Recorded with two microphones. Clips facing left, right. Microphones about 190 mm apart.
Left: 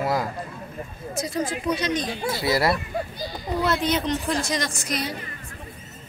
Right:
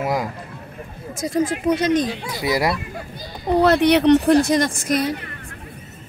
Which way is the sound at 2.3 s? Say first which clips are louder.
Right 2 dB; 15° right (ahead or behind).